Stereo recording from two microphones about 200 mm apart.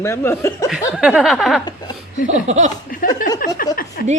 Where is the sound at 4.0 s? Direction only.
50° left (ahead or behind).